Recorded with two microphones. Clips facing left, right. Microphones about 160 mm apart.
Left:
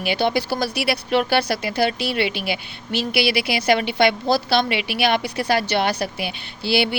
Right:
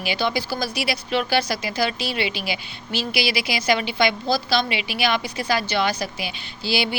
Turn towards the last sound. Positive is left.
turn(degrees=65)  # may be behind; listen again after turning